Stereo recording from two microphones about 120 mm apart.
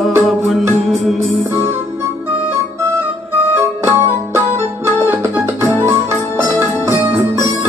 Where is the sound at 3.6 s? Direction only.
20° right (ahead or behind).